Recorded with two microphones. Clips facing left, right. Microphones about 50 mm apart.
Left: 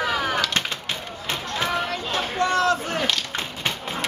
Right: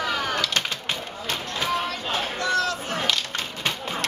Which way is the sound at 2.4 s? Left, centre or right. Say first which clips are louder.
Left 6 dB; left.